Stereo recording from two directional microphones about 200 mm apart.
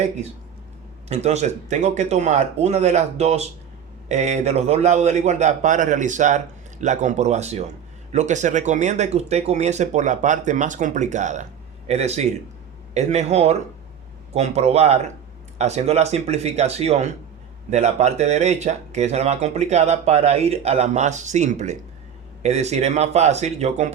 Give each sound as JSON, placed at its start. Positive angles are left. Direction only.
{"t": 1.0, "sound": "speech", "side_deg": -35}